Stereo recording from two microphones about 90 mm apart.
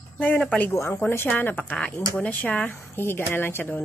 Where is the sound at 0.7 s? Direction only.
30° left (ahead or behind).